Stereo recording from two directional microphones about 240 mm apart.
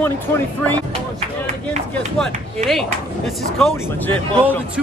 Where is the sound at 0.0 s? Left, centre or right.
Centre.